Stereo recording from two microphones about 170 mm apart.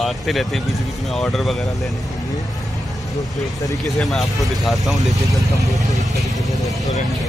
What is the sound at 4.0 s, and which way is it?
Speech, centre (ahead or behind).